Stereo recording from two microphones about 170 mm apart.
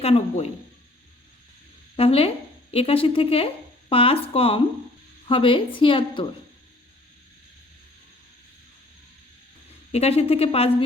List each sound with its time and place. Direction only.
0.0 s speech: 35° left (ahead or behind)
2.0 s speech: 35° left (ahead or behind)
9.9 s speech: 35° left (ahead or behind)